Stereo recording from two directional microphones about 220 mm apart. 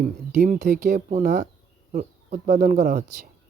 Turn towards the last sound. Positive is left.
turn(degrees=-35)  # may be behind; listen again after turning